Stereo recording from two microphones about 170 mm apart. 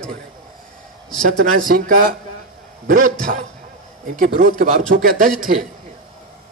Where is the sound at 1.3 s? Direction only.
55° right (ahead or behind).